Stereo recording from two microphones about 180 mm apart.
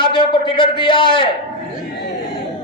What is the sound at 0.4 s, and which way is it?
Speech, 25° left (ahead or behind).